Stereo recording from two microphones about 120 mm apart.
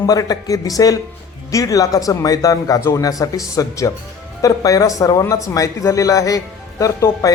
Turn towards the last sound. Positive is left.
turn(degrees=30)  # may be behind; listen again after turning